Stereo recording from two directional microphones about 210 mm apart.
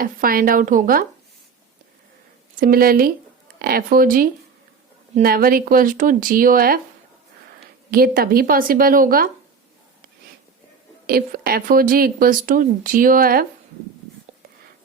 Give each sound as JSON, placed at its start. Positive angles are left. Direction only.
{"t": 0.0, "sound": "speech", "side_deg": -45}
{"t": 2.6, "sound": "speech", "side_deg": -45}
{"t": 7.9, "sound": "speech", "side_deg": -45}
{"t": 11.0, "sound": "speech", "side_deg": -45}